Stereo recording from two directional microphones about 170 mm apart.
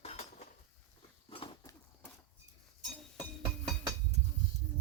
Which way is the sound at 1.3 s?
30° left (ahead or behind).